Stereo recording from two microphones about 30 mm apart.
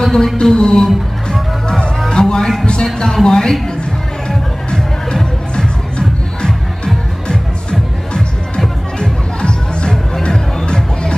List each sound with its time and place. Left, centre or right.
0.0 s music: centre
0.4 s speech: left
2.0 s music: left
2.6 s speech: left
9.0 s music: left